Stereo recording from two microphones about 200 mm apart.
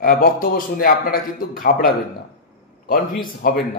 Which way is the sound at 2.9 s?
45° left (ahead or behind).